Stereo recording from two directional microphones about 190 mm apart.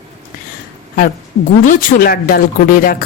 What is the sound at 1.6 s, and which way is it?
Speech, 45° left (ahead or behind).